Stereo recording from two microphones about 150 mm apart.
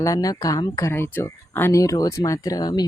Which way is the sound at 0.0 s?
20° left (ahead or behind).